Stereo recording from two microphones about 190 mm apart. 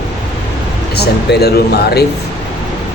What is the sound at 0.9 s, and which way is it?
Speech, 60° left (ahead or behind).